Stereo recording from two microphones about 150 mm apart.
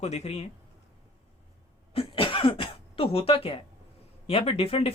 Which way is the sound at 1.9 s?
35° left (ahead or behind).